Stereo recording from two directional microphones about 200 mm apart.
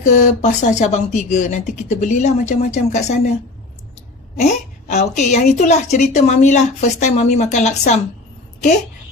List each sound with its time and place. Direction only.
0.0 s a woman's voice: 40° left (ahead or behind)
4.4 s a woman's voice: 35° left (ahead or behind)